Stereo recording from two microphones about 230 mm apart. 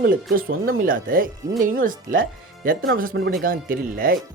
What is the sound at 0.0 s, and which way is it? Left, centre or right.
Speech, right.